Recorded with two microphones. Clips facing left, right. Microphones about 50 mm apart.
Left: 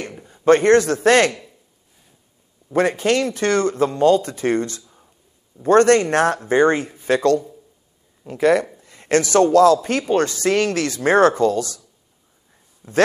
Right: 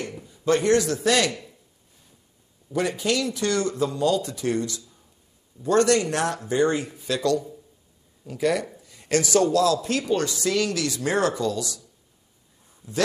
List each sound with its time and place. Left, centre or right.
0.2 s a man's voice: left
2.7 s a man's voice: left
12.8 s a man's voice: left